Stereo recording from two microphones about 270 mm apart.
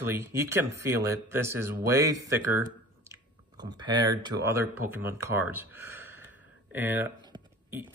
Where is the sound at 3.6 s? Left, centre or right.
Centre.